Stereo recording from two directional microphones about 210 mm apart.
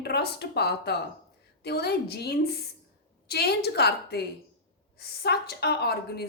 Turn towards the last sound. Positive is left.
turn(degrees=50)  # may be behind; listen again after turning